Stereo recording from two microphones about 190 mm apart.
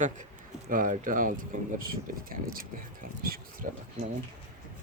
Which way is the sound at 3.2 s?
50° right (ahead or behind).